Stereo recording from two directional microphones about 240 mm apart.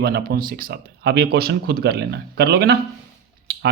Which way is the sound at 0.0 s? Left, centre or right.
Right.